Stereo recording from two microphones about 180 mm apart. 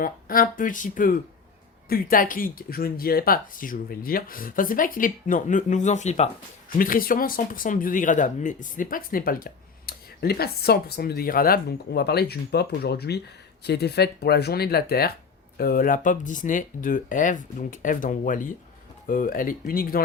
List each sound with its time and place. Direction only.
0.0 s speech: 50° left (ahead or behind)
6.7 s speech: 50° left (ahead or behind)